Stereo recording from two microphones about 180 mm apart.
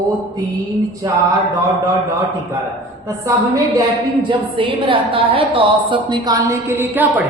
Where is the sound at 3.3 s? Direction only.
20° right (ahead or behind).